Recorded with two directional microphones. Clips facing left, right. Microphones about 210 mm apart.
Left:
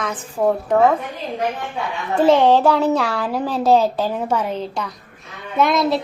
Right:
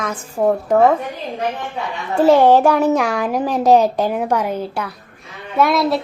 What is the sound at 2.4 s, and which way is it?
A woman's voice, 10° right (ahead or behind).